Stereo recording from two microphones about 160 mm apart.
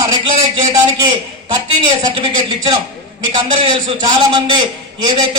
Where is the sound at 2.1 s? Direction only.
30° right (ahead or behind).